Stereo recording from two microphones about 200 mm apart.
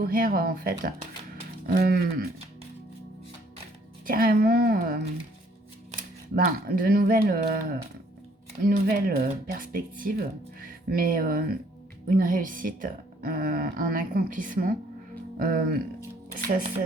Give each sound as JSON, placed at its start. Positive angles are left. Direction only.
{"t": 0.0, "sound": "a woman's voice", "side_deg": -45}
{"t": 4.0, "sound": "a woman's voice", "side_deg": -45}
{"t": 8.6, "sound": "a woman's voice", "side_deg": -45}